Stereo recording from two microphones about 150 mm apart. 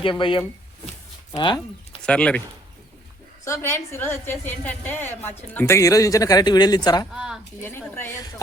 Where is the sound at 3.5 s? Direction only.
15° left (ahead or behind).